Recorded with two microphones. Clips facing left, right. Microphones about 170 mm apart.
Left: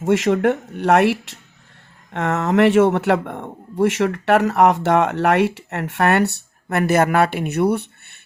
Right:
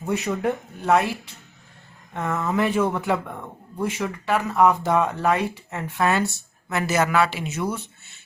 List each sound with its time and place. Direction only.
0.0 s speech: 90° left; by 8.2 s 65° left (ahead or behind)